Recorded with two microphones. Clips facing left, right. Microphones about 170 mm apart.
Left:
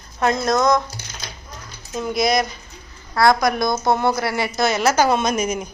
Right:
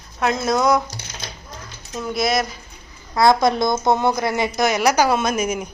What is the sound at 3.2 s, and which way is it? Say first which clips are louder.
A woman's voice: right 1 dB; 20° right (ahead or behind).